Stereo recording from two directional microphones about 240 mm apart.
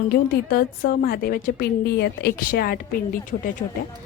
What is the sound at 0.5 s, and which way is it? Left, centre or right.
A woman's voice, left.